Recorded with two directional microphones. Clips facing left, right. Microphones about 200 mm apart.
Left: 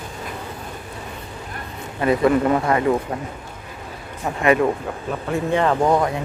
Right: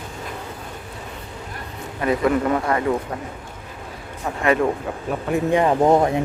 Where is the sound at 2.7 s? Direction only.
20° left (ahead or behind).